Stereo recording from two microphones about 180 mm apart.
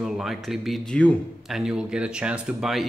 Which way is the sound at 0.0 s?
Centre (ahead or behind).